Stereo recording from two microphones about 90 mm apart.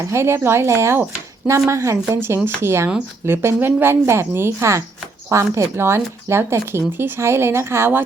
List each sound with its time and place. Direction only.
0.0 s speech: 30° right (ahead or behind)